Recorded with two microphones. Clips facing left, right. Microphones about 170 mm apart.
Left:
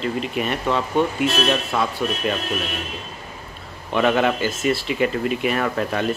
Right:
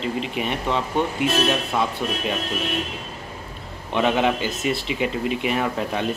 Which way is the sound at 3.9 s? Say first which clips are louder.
Left 2 dB; 15° right (ahead or behind).